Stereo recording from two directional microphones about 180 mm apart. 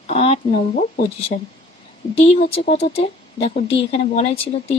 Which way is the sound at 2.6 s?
35° left (ahead or behind).